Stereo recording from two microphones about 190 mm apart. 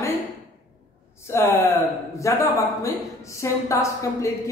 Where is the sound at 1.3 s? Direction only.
15° left (ahead or behind).